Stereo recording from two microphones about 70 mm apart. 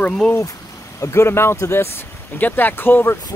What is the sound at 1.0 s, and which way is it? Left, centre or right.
Speech, left.